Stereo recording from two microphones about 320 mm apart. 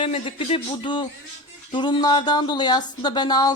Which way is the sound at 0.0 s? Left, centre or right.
Centre.